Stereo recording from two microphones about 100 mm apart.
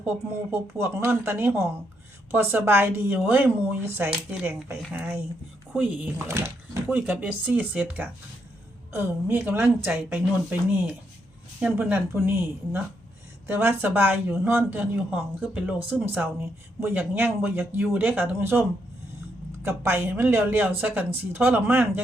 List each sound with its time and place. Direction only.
0.5 s a woman's voice: 25° right (ahead or behind)
6.1 s speech: 25° right (ahead or behind)
6.9 s a woman's voice: 15° right (ahead or behind)
19.6 s speech: 25° right (ahead or behind)